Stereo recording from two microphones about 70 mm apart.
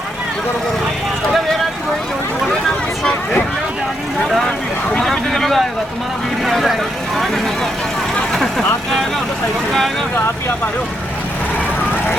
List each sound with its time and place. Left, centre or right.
4.3 s vehicle: centre
6.4 s speech: centre
8.3 s vehicle: centre